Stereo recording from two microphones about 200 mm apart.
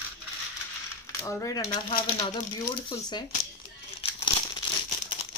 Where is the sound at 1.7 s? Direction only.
25° left (ahead or behind).